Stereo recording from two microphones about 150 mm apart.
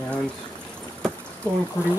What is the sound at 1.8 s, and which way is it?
Speech, 15° left (ahead or behind).